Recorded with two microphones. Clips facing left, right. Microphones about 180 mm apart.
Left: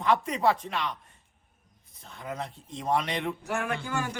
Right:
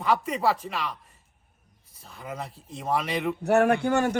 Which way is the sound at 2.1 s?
5° right (ahead or behind).